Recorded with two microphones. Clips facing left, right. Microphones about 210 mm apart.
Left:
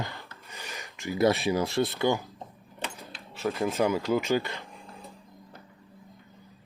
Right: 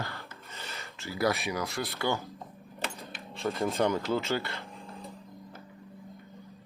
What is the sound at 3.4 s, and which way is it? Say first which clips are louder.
Speech: left 2 dB; centre (ahead or behind).